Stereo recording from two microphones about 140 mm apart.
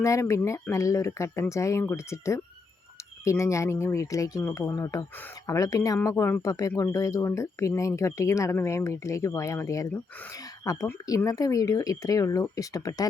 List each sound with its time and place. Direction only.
0.0 s speech: 20° left (ahead or behind)